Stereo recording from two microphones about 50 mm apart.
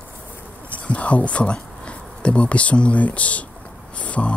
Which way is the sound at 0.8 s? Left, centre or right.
Left.